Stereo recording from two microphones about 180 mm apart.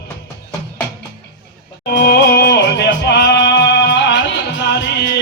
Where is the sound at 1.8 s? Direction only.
60° left (ahead or behind).